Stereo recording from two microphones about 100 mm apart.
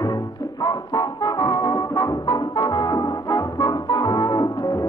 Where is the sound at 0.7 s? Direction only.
40° left (ahead or behind).